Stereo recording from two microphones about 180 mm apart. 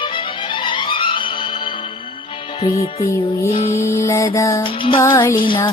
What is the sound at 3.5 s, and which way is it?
Music, 40° left (ahead or behind).